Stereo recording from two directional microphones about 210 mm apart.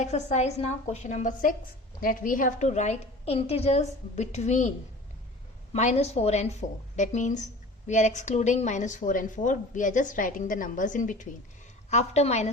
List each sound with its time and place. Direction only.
0.0 s a woman's voice: 35° left (ahead or behind)
5.7 s a woman's voice: 35° left (ahead or behind)